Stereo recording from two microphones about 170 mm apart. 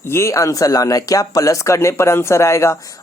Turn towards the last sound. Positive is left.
turn(degrees=20)  # may be behind; listen again after turning